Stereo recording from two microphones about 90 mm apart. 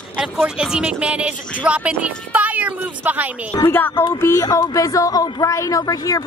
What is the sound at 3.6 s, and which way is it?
Speech, 25° left (ahead or behind).